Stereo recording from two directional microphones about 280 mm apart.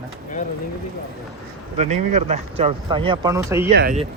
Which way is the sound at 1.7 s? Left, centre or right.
Right.